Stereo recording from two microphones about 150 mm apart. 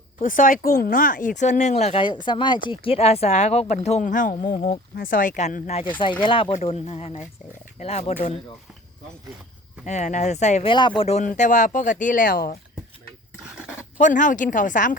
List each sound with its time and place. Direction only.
0.2 s speech: 60° left (ahead or behind); by 2.0 s 45° left (ahead or behind)
2.0 s speech: 30° left (ahead or behind); by 5.8 s 55° left (ahead or behind)
6.0 s speech: 35° left (ahead or behind)
9.8 s speech: 50° left (ahead or behind)
10.7 s speech: 35° left (ahead or behind); by 12.5 s 70° left (ahead or behind)
13.4 s dog: 5° right (ahead or behind)
14.0 s speech: 55° left (ahead or behind)